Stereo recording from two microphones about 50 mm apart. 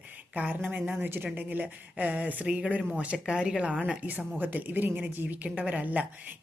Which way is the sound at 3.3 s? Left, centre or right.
Centre.